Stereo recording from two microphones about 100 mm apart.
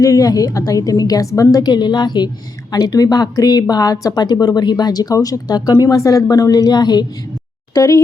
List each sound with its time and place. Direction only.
0.0 s speech: 35° left (ahead or behind)